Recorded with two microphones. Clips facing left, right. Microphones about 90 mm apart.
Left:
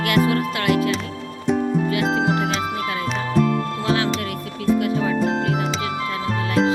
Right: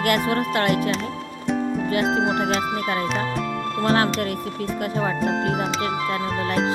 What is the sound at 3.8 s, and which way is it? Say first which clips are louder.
Music: right 2 dB; 40° right (ahead or behind).